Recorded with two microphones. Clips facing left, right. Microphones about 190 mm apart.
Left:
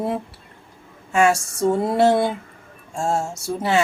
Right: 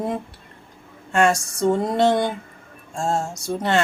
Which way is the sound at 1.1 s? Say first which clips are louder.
Left 1 dB; 5° left (ahead or behind).